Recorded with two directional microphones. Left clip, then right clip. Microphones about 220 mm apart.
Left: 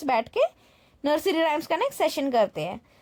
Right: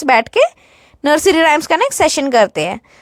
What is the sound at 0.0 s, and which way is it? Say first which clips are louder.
Speech: right 12 dB; 25° right (ahead or behind).